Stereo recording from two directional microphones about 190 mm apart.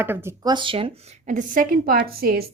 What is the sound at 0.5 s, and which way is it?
A woman's voice, 25° right (ahead or behind).